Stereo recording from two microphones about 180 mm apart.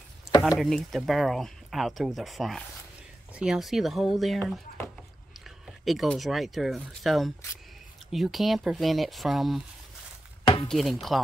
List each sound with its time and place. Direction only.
0.6 s speech: centre (ahead or behind)
5.9 s speech: centre (ahead or behind)
10.4 s chopping: 25° left (ahead or behind)
10.7 s speech: centre (ahead or behind)